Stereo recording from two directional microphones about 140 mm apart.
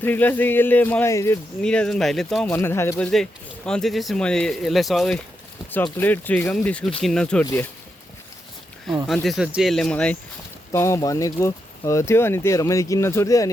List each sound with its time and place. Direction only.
0.0 s speech: 15° left (ahead or behind)
1.6 s speech: 5° left (ahead or behind)
2.5 s speech: 15° left (ahead or behind)
3.0 s speech: 5° left (ahead or behind)
6.0 s speech: 10° left (ahead or behind)
8.9 s speech: centre (ahead or behind)
10.7 s speech: 20° left (ahead or behind)